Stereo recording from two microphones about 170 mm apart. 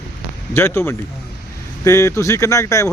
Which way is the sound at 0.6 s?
15° left (ahead or behind).